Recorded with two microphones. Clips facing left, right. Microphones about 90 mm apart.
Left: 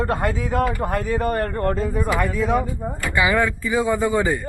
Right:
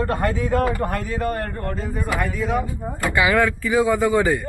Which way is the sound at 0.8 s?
20° left (ahead or behind).